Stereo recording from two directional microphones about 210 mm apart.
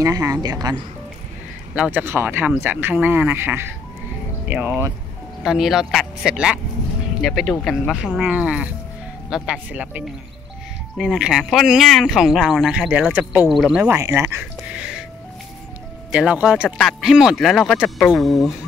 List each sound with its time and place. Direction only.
0.0 s speech: 15° right (ahead or behind)
1.8 s speech: 10° right (ahead or behind)
16.1 s speech: 5° right (ahead or behind)